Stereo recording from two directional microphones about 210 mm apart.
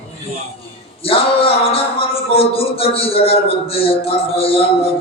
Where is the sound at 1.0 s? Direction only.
25° left (ahead or behind).